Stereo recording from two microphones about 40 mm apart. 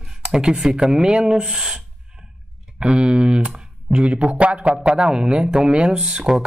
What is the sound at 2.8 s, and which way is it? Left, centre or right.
A man's voice, right.